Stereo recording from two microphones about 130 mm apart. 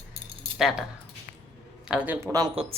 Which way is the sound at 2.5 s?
50° right (ahead or behind).